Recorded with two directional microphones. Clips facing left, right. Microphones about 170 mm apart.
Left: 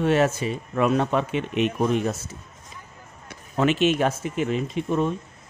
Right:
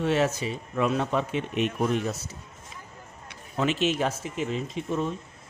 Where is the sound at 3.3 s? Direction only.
60° left (ahead or behind).